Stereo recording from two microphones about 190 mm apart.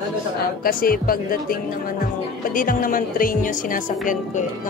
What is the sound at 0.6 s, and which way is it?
Speech, 50° left (ahead or behind).